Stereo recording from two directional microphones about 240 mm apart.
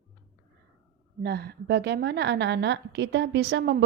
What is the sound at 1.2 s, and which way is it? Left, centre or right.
A woman's voice, right.